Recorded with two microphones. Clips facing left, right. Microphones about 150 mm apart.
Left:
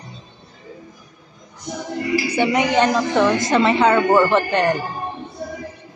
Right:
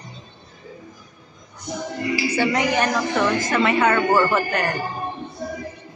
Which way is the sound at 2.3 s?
20° left (ahead or behind).